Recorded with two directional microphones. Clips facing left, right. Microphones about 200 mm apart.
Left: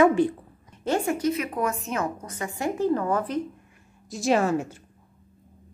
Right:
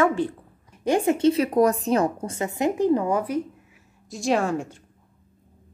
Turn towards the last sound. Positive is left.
turn(degrees=5)  # may be behind; listen again after turning